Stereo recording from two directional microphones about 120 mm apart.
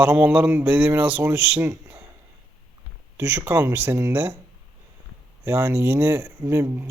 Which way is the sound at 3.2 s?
20° right (ahead or behind).